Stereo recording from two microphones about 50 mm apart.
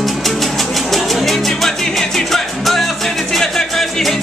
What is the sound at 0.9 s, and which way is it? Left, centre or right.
Music, centre.